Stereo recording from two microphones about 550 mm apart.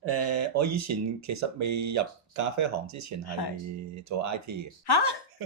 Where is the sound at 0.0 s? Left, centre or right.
Right.